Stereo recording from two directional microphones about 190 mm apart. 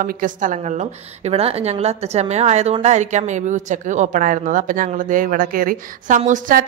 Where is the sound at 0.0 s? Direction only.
45° right (ahead or behind).